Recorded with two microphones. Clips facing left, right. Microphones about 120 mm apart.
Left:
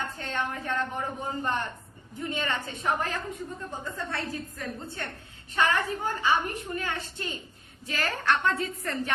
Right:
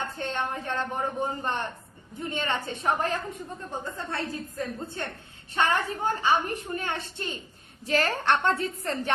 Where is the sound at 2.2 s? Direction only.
30° right (ahead or behind).